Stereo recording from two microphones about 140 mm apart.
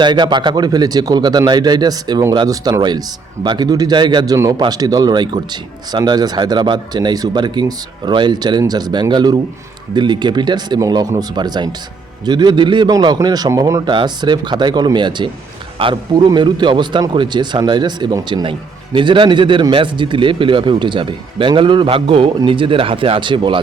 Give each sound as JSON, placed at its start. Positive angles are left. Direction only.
{"t": 0.0, "sound": "a man's voice", "side_deg": -35}